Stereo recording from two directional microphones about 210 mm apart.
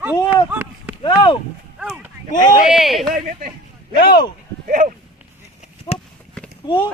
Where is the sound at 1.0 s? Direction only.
20° left (ahead or behind).